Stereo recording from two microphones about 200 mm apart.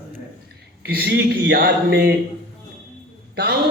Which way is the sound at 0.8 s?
50° right (ahead or behind).